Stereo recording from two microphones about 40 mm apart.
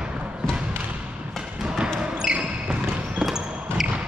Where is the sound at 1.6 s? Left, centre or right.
Centre.